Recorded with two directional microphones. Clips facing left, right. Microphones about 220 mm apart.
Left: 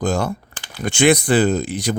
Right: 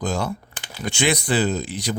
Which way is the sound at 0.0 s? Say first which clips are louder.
Left 4 dB; 50° left (ahead or behind).